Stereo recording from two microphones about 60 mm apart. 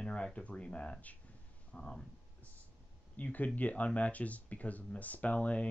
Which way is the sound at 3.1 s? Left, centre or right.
Left.